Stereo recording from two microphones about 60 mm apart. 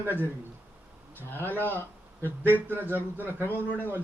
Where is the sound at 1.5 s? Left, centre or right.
Left.